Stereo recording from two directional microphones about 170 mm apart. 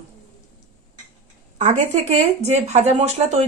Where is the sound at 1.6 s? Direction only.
40° right (ahead or behind).